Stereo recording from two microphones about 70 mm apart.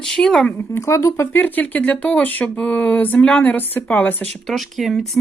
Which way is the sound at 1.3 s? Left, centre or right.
Left.